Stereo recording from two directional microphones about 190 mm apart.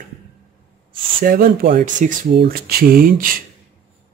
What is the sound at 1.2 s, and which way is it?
Speech, 50° right (ahead or behind).